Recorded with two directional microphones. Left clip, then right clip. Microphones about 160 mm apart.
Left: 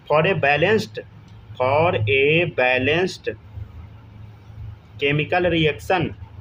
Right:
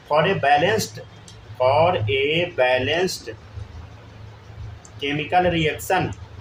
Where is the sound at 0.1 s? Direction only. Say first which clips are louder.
Even; 50° left (ahead or behind).